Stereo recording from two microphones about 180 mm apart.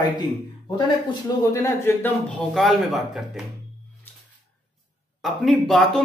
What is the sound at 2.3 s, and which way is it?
Speech, centre (ahead or behind).